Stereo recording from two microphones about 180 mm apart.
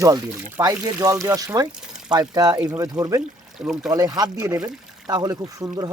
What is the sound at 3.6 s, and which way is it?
Speech, centre (ahead or behind).